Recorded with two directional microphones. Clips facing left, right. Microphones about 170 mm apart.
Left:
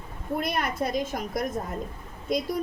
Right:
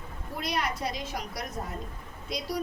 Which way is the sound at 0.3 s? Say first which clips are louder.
Left 4 dB; 50° left (ahead or behind).